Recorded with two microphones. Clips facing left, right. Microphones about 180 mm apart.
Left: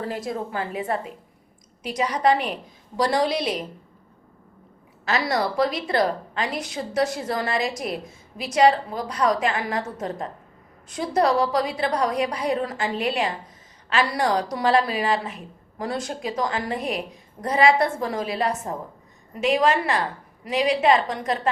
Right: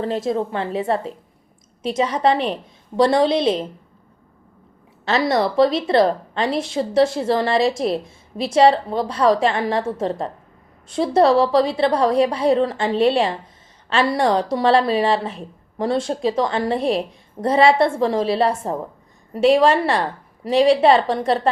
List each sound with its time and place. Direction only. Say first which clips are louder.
0.0 s a woman's voice: right 7 dB; 25° right (ahead or behind)
5.0 s a woman's voice: right 5 dB; 25° right (ahead or behind)